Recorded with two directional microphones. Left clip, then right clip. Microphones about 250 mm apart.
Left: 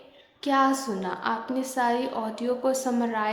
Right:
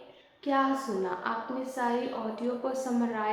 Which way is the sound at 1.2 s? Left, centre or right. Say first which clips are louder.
Left 4 dB; left.